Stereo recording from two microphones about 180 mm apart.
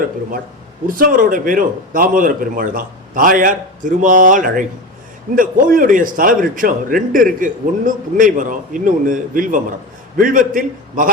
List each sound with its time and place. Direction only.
0.9 s a man's voice: 50° right (ahead or behind)